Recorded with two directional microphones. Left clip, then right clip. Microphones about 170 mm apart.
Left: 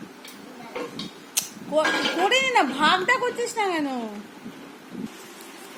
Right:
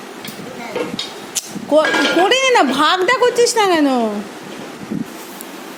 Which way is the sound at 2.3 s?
25° right (ahead or behind).